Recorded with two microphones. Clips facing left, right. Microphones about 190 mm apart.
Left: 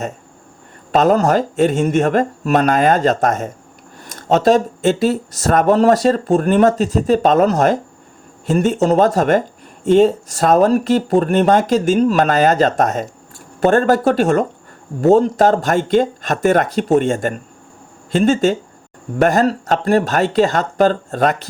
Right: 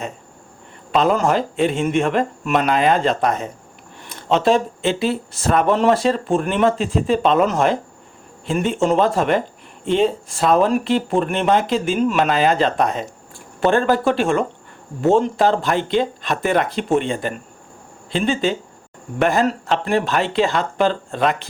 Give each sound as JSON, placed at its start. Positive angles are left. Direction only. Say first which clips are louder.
{"t": 0.9, "sound": "speech", "louder": "left 4 dB", "side_deg": 45}